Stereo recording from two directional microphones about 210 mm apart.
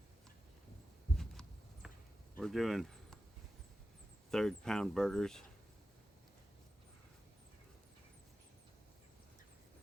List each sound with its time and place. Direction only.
1.1 s a sound: centre (ahead or behind)
2.4 s speech: centre (ahead or behind)
4.3 s speech: centre (ahead or behind)